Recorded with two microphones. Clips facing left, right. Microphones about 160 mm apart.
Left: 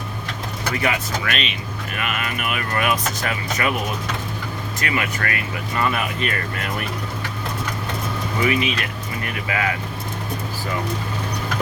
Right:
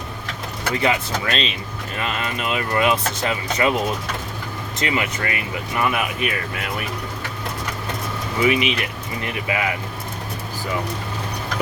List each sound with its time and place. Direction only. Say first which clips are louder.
0.8 s speech: right 3 dB; 25° right (ahead or behind)
4.8 s speech: right 2 dB; 20° right (ahead or behind)
8.4 s speech: right 3 dB; 20° right (ahead or behind)